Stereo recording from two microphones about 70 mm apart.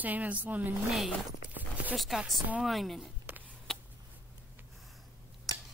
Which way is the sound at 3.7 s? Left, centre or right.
Centre.